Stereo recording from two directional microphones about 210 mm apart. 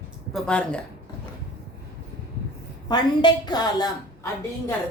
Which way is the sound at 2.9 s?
20° left (ahead or behind).